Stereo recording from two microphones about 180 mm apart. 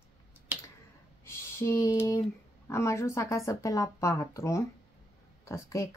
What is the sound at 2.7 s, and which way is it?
Speech, 15° left (ahead or behind).